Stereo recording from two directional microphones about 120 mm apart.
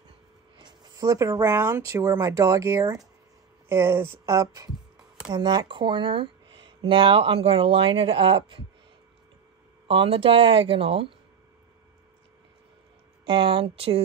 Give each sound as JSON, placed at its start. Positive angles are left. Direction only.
{"t": 0.6, "sound": "speech", "side_deg": -35}
{"t": 9.8, "sound": "speech", "side_deg": -50}
{"t": 13.2, "sound": "speech", "side_deg": -40}